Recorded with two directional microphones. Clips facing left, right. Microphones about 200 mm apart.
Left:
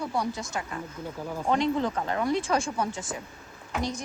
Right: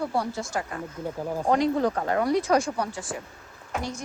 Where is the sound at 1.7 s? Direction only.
50° right (ahead or behind).